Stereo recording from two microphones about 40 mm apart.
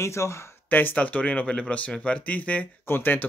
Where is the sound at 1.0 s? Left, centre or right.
Left.